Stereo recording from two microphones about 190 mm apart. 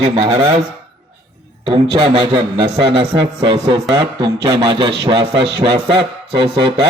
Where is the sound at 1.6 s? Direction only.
30° right (ahead or behind).